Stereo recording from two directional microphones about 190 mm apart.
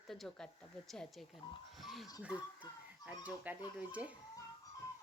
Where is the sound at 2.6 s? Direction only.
25° left (ahead or behind).